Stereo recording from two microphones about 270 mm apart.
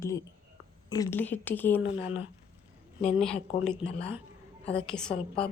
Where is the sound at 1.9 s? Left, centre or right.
Left.